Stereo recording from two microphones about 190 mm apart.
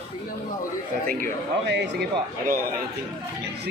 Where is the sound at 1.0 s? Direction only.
60° right (ahead or behind).